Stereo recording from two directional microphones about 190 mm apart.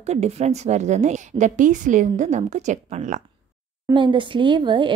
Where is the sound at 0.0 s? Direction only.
35° right (ahead or behind).